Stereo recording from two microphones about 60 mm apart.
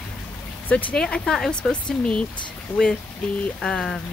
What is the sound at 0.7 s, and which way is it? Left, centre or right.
Speech, left.